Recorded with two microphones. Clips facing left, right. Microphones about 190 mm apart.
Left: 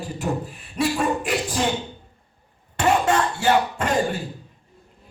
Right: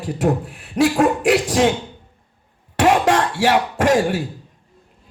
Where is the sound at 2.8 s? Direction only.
90° right.